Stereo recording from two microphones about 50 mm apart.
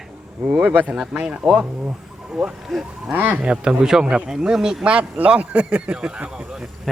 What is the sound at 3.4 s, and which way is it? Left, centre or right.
Speech, centre.